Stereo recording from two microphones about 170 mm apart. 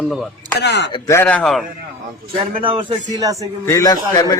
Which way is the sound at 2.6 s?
30° right (ahead or behind).